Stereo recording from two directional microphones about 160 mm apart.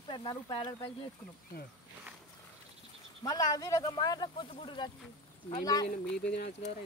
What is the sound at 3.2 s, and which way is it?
Speech, 25° left (ahead or behind).